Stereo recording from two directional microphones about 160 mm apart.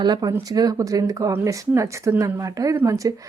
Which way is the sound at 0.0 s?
25° right (ahead or behind).